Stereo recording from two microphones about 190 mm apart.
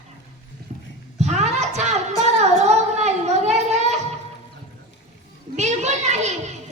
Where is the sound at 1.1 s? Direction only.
35° right (ahead or behind).